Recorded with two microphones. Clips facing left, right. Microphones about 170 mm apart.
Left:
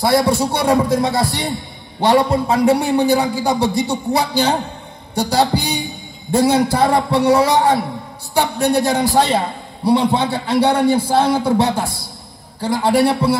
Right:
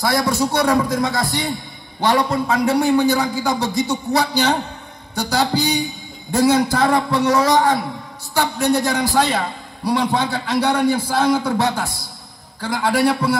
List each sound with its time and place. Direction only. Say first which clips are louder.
0.0 s a man's voice: left 4 dB; 30° left (ahead or behind)